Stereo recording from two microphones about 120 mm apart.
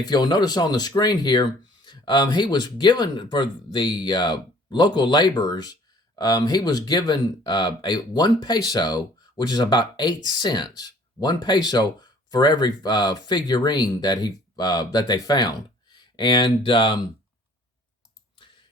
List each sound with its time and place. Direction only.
0.0 s speech: 35° left (ahead or behind)